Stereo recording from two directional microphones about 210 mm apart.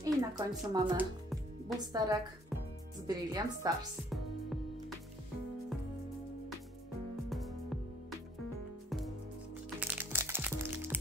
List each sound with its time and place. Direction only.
0.0 s speech: 15° right (ahead or behind)
1.9 s speech: 15° right (ahead or behind)
4.1 s music: centre (ahead or behind)
7.2 s music: centre (ahead or behind)
9.8 s music: 10° right (ahead or behind)